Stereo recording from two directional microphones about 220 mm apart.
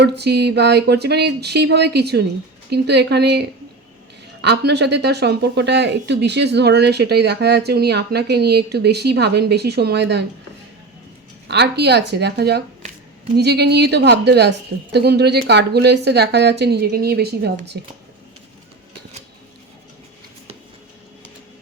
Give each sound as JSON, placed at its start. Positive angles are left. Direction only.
{"t": 0.0, "sound": "a woman's voice", "side_deg": -50}
{"t": 11.4, "sound": "a woman's voice", "side_deg": -50}